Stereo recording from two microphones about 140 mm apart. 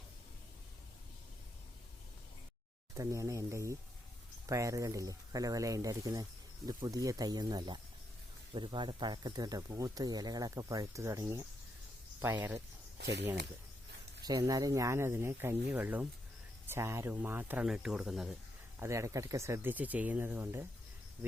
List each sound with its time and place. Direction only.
2.9 s a sound: 20° right (ahead or behind)
4.4 s speech: 25° right (ahead or behind)
14.3 s speech: 25° right (ahead or behind); by 18.3 s 5° right (ahead or behind)
18.8 s speech: 20° right (ahead or behind)